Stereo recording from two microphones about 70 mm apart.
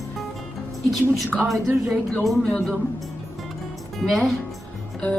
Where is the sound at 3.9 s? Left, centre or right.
Centre.